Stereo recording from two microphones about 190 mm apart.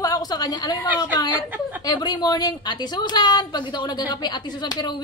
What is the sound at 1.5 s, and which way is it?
Chuckle, 10° right (ahead or behind).